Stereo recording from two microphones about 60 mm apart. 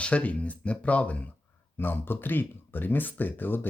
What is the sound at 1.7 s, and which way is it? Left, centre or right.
Speech, left.